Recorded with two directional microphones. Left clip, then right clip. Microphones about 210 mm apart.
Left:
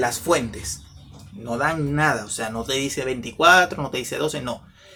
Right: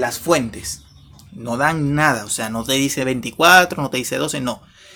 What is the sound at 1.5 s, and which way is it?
Speech, 55° right (ahead or behind).